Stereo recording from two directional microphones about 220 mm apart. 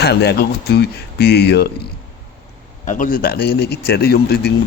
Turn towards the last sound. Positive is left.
turn(degrees=45)  # may be behind; listen again after turning